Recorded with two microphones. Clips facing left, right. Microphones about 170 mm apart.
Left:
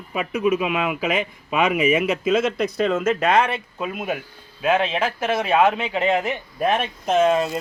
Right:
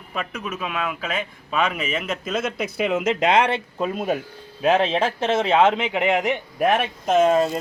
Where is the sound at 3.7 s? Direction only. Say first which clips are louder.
Right 3 dB; 35° right (ahead or behind); by 7.3 s 5° right (ahead or behind).